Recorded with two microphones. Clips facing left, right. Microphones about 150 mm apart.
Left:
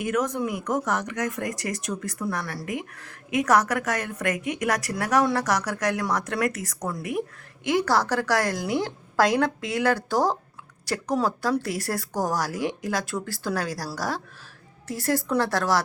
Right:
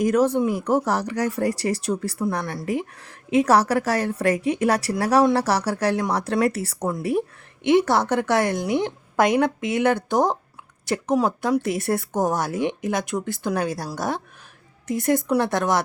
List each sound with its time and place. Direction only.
0.0 s speech: 35° right (ahead or behind)